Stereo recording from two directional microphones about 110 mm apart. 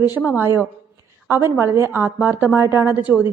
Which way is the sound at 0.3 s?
25° right (ahead or behind).